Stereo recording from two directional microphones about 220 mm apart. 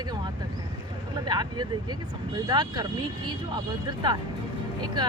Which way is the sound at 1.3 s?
20° right (ahead or behind).